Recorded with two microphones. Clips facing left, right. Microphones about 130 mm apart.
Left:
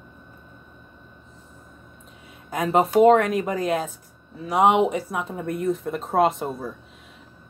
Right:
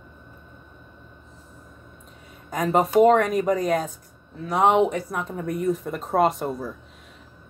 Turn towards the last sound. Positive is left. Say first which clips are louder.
# even
turn(degrees=0)  # may be behind; listen again after turning